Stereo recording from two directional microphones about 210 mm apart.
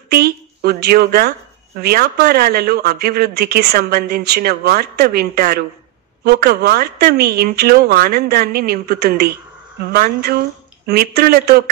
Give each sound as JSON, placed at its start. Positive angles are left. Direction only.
{"t": 0.1, "sound": "a woman's voice", "side_deg": -50}